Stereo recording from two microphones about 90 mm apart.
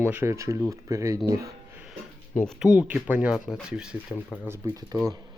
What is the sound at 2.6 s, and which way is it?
Speech, 15° right (ahead or behind).